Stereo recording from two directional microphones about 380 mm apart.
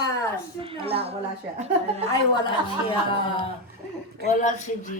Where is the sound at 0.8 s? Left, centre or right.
Centre.